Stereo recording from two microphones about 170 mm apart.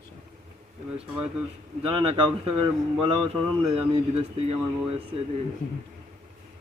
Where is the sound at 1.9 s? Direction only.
30° right (ahead or behind).